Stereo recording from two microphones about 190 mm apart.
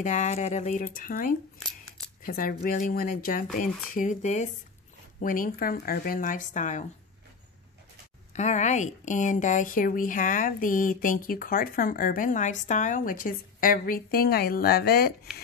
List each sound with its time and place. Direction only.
0.0 s a woman's voice: 40° left (ahead or behind)
8.3 s a woman's voice: 40° left (ahead or behind); by 15.1 s 55° left (ahead or behind)